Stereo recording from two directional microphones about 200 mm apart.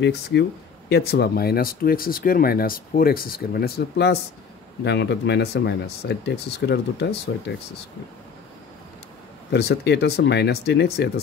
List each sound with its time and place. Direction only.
0.0 s speech: 60° left (ahead or behind)
9.5 s speech: 55° left (ahead or behind)